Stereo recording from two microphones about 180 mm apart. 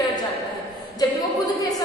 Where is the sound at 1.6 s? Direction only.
20° left (ahead or behind).